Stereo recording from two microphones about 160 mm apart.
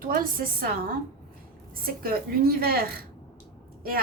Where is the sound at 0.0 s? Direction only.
65° right (ahead or behind).